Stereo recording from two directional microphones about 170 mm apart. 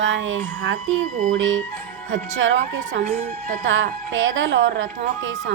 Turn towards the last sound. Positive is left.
turn(degrees=-90)